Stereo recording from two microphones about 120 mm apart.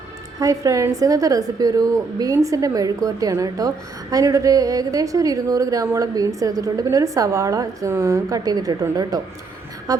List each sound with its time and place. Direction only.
0.3 s a woman's voice: 25° right (ahead or behind)